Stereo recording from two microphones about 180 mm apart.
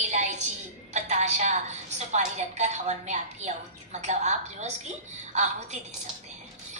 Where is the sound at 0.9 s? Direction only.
40° right (ahead or behind).